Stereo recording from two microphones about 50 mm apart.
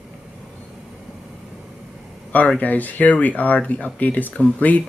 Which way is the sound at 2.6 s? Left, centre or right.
Left.